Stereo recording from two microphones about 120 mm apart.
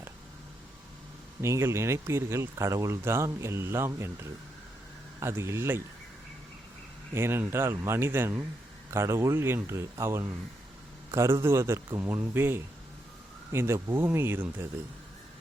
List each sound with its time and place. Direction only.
1.4 s speech: 25° right (ahead or behind)
7.1 s speech: 20° right (ahead or behind)